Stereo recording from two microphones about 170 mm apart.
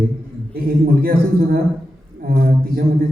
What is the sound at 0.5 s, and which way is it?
A man's voice, 60° right (ahead or behind).